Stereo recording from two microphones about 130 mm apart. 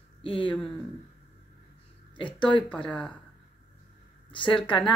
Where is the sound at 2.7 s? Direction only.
10° left (ahead or behind).